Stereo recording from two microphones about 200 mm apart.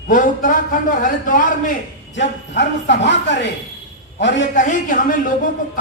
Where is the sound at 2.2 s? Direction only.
60° left (ahead or behind).